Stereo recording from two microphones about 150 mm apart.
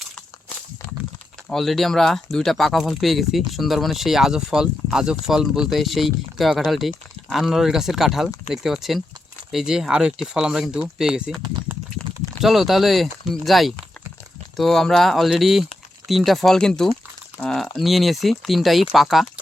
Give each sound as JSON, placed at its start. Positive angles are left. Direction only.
{"t": 1.5, "sound": "speech", "side_deg": 0}
{"t": 12.4, "sound": "speech", "side_deg": 0}